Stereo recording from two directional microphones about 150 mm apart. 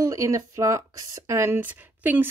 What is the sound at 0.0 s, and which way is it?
Speech, 20° right (ahead or behind).